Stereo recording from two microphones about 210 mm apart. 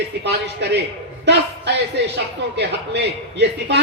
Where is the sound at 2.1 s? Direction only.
55° right (ahead or behind).